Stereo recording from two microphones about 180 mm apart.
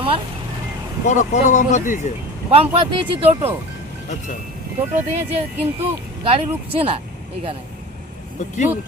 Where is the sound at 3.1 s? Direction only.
30° right (ahead or behind).